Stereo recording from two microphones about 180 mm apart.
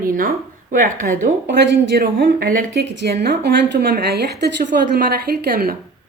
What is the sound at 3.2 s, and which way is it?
A woman's voice, 65° right (ahead or behind).